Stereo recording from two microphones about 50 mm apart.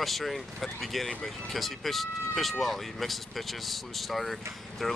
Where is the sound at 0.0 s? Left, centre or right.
Centre.